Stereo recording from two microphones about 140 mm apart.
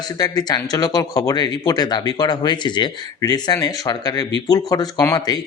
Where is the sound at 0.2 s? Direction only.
25° left (ahead or behind).